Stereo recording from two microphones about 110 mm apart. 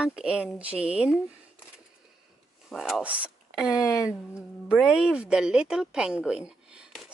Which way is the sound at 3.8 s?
30° left (ahead or behind).